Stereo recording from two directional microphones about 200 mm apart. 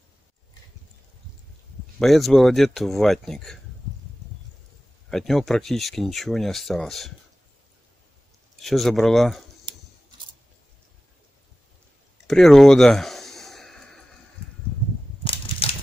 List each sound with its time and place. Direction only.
2.0 s speech: centre (ahead or behind)
5.1 s speech: centre (ahead or behind)
8.5 s speech: centre (ahead or behind)
9.7 s scissors: 25° right (ahead or behind)
12.3 s a sound: centre (ahead or behind)
15.2 s crushing: 30° left (ahead or behind)